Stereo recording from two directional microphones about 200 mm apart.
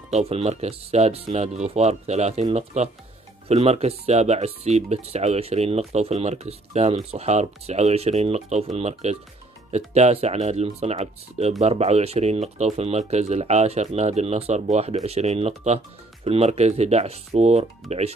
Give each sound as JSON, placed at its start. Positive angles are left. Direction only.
{"t": 0.1, "sound": "speech", "side_deg": -30}